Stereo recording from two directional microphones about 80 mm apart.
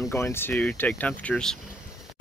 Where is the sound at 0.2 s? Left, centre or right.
Left; by 1.6 s centre.